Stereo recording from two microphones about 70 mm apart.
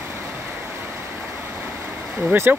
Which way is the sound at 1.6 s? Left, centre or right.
Right.